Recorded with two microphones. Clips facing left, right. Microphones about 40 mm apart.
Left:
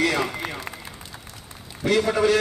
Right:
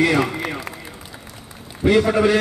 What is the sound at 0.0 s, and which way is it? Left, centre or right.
Run, centre.